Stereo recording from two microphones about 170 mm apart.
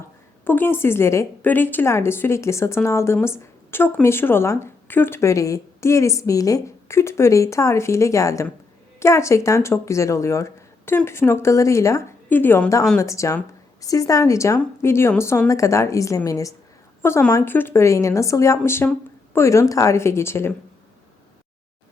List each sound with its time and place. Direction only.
0.4 s a woman's voice: 10° left (ahead or behind)